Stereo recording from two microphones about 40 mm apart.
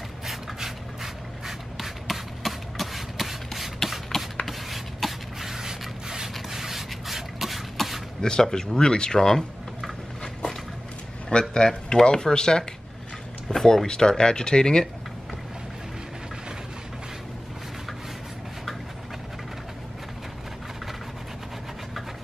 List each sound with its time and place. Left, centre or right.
0.3 s a sound: centre
6.5 s rub: centre
7.7 s a sound: centre
8.2 s speech: centre
11.2 s speech: centre
13.5 s speech: centre
13.8 s speech: centre